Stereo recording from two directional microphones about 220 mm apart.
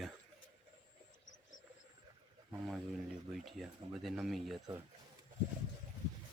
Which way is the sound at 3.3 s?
Centre (ahead or behind).